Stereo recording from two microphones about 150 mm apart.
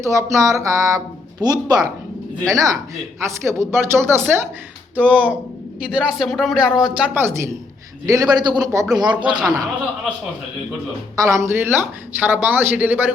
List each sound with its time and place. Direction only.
0.0 s speech: 20° right (ahead or behind)
11.2 s speech: 20° right (ahead or behind)